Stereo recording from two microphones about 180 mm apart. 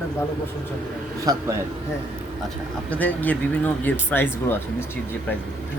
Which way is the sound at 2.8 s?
10° left (ahead or behind).